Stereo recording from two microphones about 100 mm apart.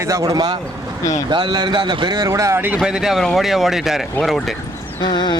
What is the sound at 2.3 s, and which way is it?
Speech, 30° right (ahead or behind).